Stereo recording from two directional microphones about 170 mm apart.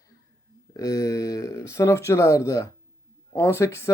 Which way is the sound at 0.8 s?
20° left (ahead or behind).